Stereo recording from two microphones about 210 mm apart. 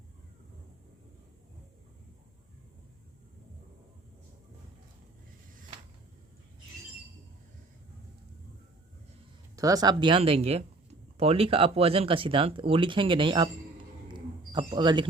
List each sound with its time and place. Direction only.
9.6 s speech: 15° right (ahead or behind)